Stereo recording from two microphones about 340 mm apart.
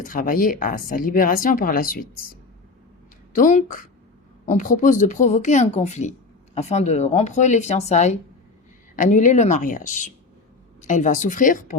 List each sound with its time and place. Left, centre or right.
0.0 s speech: left
3.3 s speech: left